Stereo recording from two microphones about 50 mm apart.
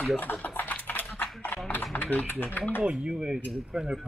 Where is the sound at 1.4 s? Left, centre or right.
Left.